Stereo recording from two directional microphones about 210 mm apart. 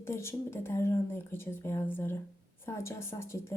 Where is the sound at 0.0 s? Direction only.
10° left (ahead or behind).